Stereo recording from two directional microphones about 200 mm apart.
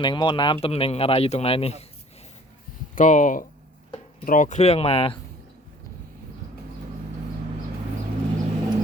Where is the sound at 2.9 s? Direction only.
40° left (ahead or behind).